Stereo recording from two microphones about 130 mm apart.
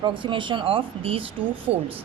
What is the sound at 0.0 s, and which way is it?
Speech, 40° right (ahead or behind).